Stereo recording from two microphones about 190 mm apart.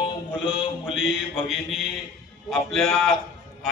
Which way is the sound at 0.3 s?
5° right (ahead or behind).